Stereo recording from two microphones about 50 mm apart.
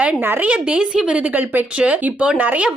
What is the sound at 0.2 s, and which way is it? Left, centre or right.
Speech, right.